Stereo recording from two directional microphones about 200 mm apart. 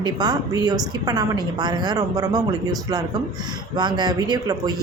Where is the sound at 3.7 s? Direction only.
20° right (ahead or behind).